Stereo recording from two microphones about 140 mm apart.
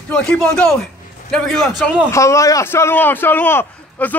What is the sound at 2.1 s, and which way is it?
A man's voice, 20° left (ahead or behind).